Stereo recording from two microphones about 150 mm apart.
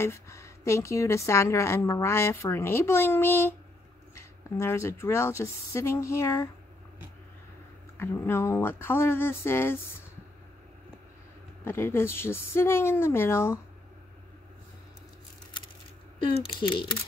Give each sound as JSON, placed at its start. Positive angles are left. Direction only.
{"t": 0.0, "sound": "a woman's voice", "side_deg": 20}
{"t": 8.0, "sound": "speech", "side_deg": 15}
{"t": 11.6, "sound": "speech", "side_deg": 15}
{"t": 16.2, "sound": "speech", "side_deg": 35}